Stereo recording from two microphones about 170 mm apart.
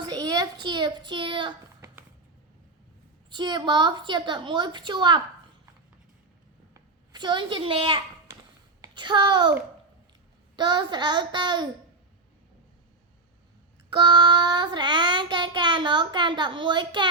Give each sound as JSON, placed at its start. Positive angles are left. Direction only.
{"t": 0.0, "sound": "a child's voice", "side_deg": -25}
{"t": 3.2, "sound": "child singing", "side_deg": -25}
{"t": 6.7, "sound": "a child's voice", "side_deg": -25}
{"t": 10.6, "sound": "child singing", "side_deg": -25}
{"t": 13.9, "sound": "child singing", "side_deg": -25}